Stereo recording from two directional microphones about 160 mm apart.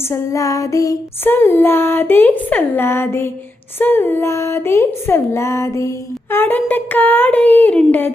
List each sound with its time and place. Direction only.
0.1 s child singing: 20° left (ahead or behind)